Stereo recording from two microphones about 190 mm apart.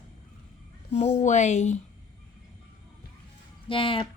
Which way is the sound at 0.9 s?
35° left (ahead or behind).